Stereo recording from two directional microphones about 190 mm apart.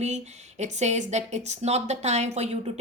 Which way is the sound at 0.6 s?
35° right (ahead or behind).